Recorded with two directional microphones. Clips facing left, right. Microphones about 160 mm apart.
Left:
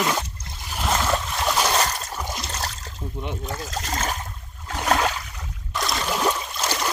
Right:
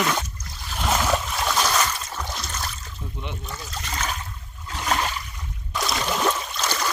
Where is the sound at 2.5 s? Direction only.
35° left (ahead or behind).